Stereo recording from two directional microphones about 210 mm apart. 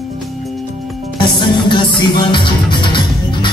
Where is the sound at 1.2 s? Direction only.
20° left (ahead or behind).